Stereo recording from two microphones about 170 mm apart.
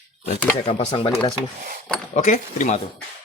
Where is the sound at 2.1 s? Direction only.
45° left (ahead or behind).